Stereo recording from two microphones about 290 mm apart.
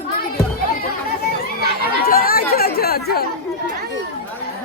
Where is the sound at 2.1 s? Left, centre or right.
Left.